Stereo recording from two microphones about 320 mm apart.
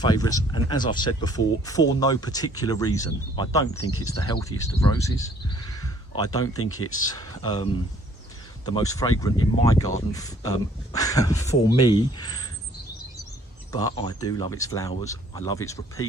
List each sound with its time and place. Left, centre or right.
0.0 s speech: centre
3.8 s speech: left
4.0 s speech: centre
5.8 s a sound: centre
7.1 s speech: centre
13.7 s speech: centre